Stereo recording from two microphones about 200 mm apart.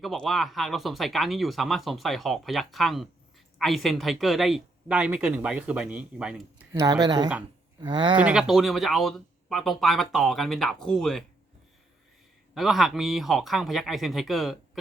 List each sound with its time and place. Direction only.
0.0 s speech: centre (ahead or behind)
6.7 s speech: 20° right (ahead or behind)
8.1 s speech: 5° right (ahead or behind)
12.5 s speech: centre (ahead or behind)